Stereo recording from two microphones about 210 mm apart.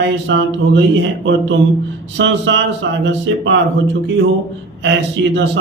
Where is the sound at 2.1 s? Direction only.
60° right (ahead or behind).